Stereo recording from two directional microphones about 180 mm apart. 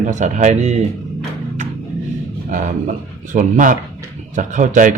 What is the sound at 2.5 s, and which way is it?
Speech, 45° right (ahead or behind).